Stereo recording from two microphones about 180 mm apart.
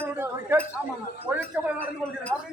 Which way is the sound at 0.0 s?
10° right (ahead or behind).